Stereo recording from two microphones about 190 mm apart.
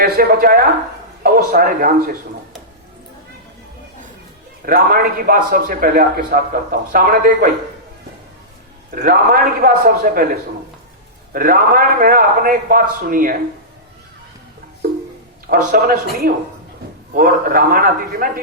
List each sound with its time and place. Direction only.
0.0 s a man's voice: 50° right (ahead or behind)
4.6 s a man's voice: 50° right (ahead or behind)
9.0 s a man's voice: 50° right (ahead or behind)
11.3 s a man's voice: 50° right (ahead or behind)
15.4 s a man's voice: 50° right (ahead or behind)
17.2 s a man's voice: 50° right (ahead or behind)